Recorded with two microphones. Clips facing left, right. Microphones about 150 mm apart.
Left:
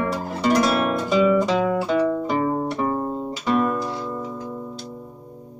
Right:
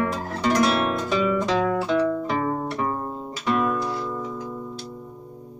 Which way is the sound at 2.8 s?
10° left (ahead or behind).